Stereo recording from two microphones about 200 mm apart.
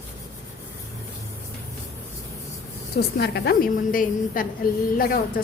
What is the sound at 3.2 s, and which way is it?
A woman's voice, 55° left (ahead or behind).